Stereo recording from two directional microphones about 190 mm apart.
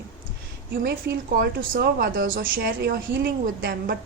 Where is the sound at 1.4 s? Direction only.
50° right (ahead or behind).